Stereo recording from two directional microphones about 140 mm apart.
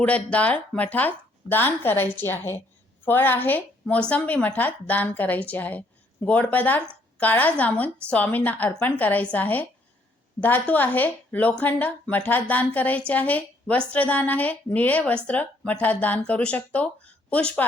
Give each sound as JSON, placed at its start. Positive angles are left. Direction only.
{"t": 0.0, "sound": "a woman's voice", "side_deg": 10}